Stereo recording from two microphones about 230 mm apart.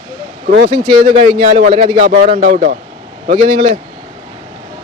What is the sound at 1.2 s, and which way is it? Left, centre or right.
A man's voice, right.